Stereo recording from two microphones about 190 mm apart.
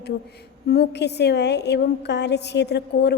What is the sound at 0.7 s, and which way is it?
A woman's voice, 60° left (ahead or behind).